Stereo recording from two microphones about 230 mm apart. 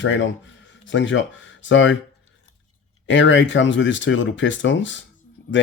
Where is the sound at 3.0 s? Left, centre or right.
Left.